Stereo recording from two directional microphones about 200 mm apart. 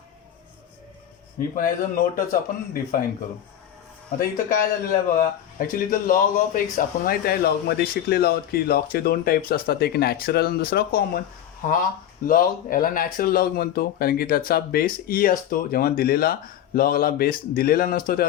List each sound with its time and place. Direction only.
1.5 s speech: 45° left (ahead or behind)
4.2 s speech: 45° left (ahead or behind)